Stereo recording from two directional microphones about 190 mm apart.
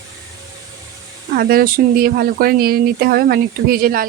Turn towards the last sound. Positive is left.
turn(degrees=-50)  # may be behind; listen again after turning